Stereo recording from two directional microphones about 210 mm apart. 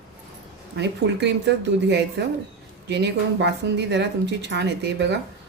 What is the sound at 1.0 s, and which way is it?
Speech, 50° right (ahead or behind).